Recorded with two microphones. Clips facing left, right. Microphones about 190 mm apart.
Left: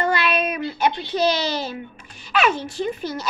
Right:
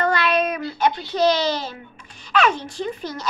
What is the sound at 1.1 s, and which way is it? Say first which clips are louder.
A child's voice: right 2 dB; 10° left (ahead or behind).